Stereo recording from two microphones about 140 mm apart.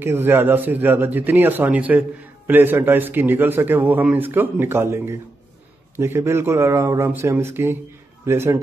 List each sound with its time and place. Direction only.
0.0 s a man's voice: 15° right (ahead or behind)